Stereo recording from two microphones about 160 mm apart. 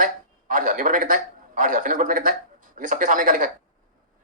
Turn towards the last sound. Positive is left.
turn(degrees=-55)  # may be behind; listen again after turning